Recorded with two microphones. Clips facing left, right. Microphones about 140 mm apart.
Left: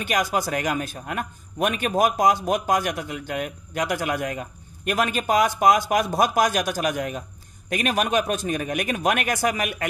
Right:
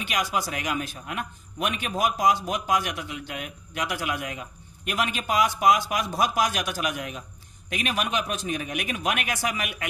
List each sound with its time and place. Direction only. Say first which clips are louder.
0.0 s a man's voice: left 4 dB; 45° left (ahead or behind)